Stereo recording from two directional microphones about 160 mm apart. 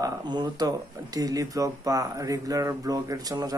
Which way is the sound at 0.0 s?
25° right (ahead or behind).